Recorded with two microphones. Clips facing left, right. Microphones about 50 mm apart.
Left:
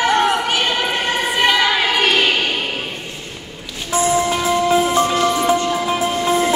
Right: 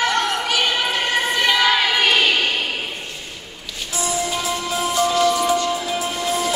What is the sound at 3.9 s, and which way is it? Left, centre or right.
Music, left.